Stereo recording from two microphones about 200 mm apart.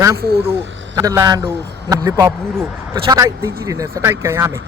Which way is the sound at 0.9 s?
15° right (ahead or behind).